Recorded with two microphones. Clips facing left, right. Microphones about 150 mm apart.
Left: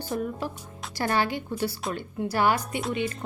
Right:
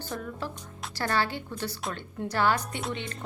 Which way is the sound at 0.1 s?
20° left (ahead or behind).